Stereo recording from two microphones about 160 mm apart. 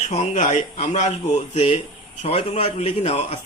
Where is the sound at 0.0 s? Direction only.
45° left (ahead or behind).